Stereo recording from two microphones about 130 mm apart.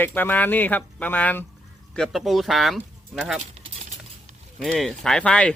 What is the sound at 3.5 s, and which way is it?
Keys jangling, 55° right (ahead or behind).